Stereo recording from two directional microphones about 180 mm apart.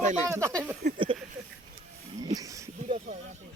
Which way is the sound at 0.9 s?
30° right (ahead or behind).